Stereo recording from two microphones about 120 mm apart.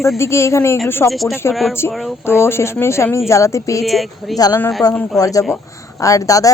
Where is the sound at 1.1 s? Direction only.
Centre (ahead or behind).